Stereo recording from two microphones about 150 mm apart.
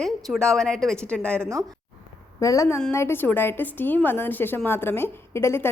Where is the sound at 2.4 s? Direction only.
20° left (ahead or behind).